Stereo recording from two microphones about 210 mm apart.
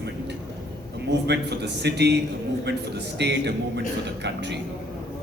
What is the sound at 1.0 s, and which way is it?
Speech, 55° right (ahead or behind).